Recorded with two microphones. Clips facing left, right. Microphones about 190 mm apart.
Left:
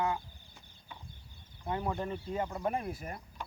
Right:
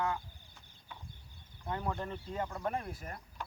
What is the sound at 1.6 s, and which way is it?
Speech, 15° left (ahead or behind).